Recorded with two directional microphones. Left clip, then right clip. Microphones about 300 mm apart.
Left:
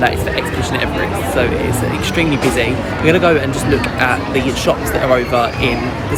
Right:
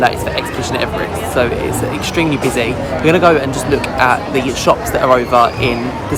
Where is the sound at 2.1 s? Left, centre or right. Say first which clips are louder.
Even; centre.